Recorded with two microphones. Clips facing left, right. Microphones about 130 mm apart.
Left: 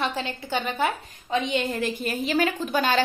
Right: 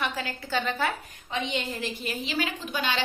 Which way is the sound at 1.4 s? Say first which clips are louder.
Left 6 dB; 50° left (ahead or behind).